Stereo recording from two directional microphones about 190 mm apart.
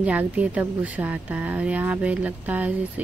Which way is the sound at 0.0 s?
5° right (ahead or behind).